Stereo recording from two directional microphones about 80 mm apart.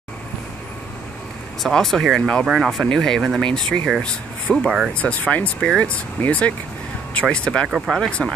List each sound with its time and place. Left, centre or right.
1.6 s speech: centre
2.4 s speech: centre
2.8 s speech: centre
4.6 s speech: centre
4.9 s speech: centre
7.6 s speech: centre
7.9 s speech: centre